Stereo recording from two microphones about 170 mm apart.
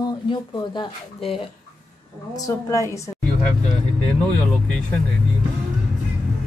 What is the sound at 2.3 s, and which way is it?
Speech, 20° left (ahead or behind).